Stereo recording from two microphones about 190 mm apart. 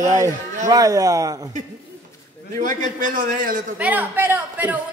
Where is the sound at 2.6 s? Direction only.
45° right (ahead or behind).